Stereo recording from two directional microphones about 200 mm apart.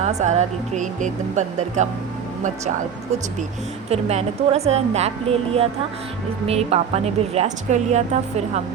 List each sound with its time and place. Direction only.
0.0 s a woman's voice: 35° right (ahead or behind)
3.8 s a woman's voice: 30° right (ahead or behind)